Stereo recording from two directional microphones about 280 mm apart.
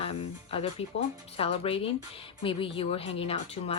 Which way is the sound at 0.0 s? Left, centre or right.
Left.